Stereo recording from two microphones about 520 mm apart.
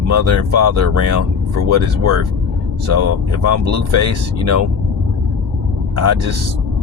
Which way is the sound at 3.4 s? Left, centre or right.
Right.